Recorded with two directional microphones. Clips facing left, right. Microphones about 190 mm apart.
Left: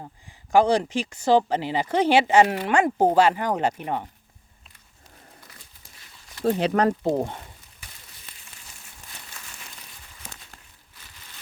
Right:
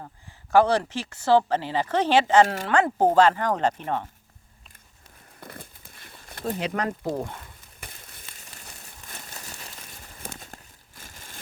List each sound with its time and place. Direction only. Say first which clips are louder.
0.0 s speech: left 1 dB; 15° left (ahead or behind)
5.4 s crumpling: right 10 dB; 55° right (ahead or behind)
6.4 s speech: left 7 dB; 35° left (ahead or behind)
7.8 s a sound: right 7 dB; 55° right (ahead or behind)
9.0 s crumpling: right 4 dB; 40° right (ahead or behind)